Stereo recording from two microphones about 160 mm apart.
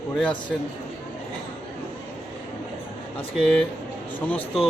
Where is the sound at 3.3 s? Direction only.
5° left (ahead or behind).